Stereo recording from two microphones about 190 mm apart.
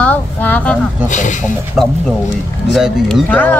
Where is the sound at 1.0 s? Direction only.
40° left (ahead or behind).